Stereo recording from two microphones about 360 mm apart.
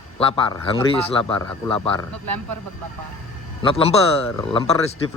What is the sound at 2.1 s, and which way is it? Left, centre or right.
Speech, right.